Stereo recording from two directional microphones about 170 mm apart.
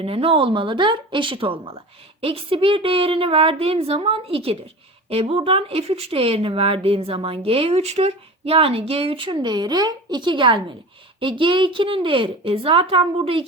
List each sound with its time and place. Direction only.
0.0 s a woman's voice: 35° right (ahead or behind)